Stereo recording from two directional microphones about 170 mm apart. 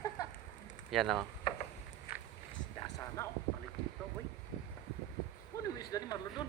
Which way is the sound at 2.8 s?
20° left (ahead or behind).